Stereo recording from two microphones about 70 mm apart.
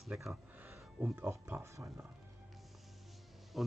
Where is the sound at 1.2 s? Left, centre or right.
Right.